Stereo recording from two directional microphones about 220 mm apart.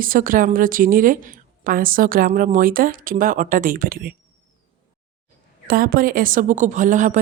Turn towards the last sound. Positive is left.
turn(degrees=-35)  # may be behind; listen again after turning